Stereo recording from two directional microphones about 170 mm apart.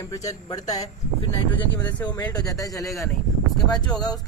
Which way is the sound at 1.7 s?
10° left (ahead or behind).